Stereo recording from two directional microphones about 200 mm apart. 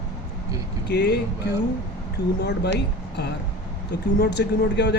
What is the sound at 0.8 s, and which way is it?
Speech, 55° left (ahead or behind).